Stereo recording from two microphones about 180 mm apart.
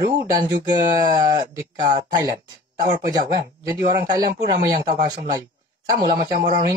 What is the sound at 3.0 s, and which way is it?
Speech, 20° right (ahead or behind).